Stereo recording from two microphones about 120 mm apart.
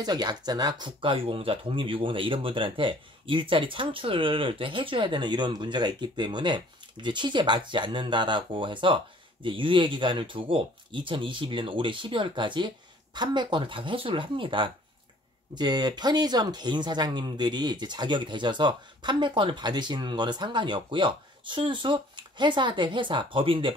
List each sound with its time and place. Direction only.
0.0 s speech: 35° right (ahead or behind)